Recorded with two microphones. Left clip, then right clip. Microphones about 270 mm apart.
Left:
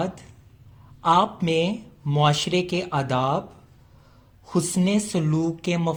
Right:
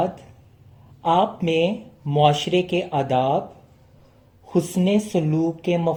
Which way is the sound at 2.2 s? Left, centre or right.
Left.